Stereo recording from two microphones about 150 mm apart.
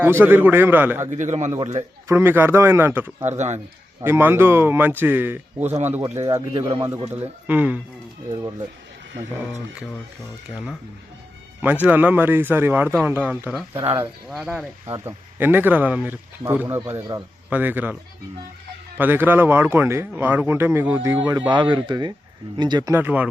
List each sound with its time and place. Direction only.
0.0 s speech: 15° right (ahead or behind)
1.1 s a man's voice: 50° right (ahead or behind)
2.0 s speech: 15° right (ahead or behind)
3.2 s a man's voice: 50° right (ahead or behind)
4.0 s speech: 15° right (ahead or behind)
6.0 s speech: 25° right (ahead or behind)
7.1 s speech: 10° right (ahead or behind)
8.3 s speech: 20° right (ahead or behind)
11.6 s speech: 10° right (ahead or behind)
14.8 s speech: 20° right (ahead or behind)
18.9 s speech: 15° right (ahead or behind)
21.5 s speech: 30° right (ahead or behind); by 23.3 s 10° right (ahead or behind)